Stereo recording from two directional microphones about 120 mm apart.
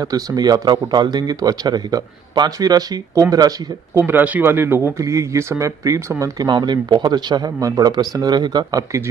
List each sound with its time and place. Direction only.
0.0 s a man's voice: 30° right (ahead or behind)
4.0 s a man's voice: 15° right (ahead or behind); by 9.0 s 35° right (ahead or behind)